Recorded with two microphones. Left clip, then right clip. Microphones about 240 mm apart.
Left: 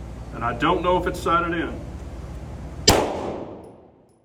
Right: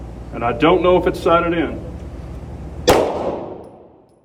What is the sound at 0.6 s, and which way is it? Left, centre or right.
A man's voice, centre.